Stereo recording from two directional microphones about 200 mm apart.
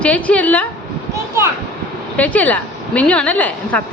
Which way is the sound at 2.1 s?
5° left (ahead or behind).